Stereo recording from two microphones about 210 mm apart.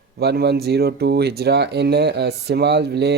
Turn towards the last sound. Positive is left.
turn(degrees=-50)  # may be behind; listen again after turning